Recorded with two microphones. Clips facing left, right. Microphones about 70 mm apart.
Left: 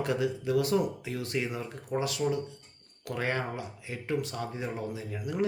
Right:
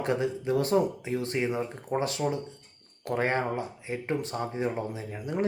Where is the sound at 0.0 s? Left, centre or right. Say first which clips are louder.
Right 1 dB; right.